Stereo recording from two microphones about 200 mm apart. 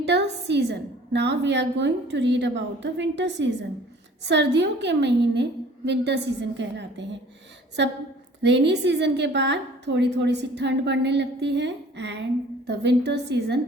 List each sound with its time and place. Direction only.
0.0 s a woman's voice: 60° right (ahead or behind)